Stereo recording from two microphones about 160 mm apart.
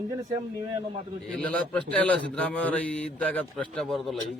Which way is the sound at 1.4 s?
5° left (ahead or behind).